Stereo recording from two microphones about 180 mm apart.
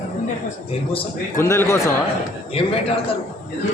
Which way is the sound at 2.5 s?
30° left (ahead or behind).